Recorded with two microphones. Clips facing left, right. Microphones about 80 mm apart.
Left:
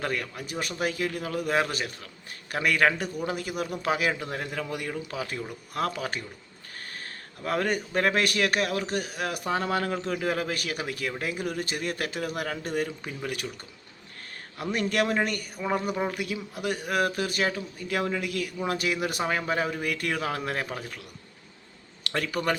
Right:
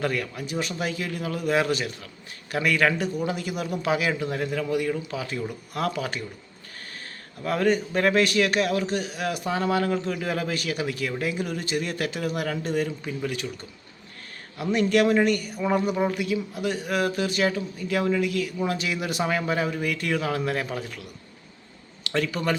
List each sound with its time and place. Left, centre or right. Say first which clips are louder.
0.0 s a man's voice: right 4 dB; left
7.4 s a man's voice: right 4 dB; left
13.2 s speech: right 2 dB; left
14.6 s a man's voice: right 5 dB; left
19.2 s speech: right 4 dB; left